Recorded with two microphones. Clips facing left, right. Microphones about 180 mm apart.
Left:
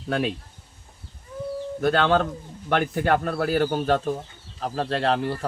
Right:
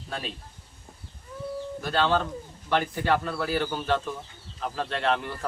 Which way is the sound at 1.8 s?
55° left (ahead or behind).